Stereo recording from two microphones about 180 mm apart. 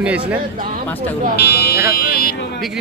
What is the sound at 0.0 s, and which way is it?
Speech, 5° right (ahead or behind).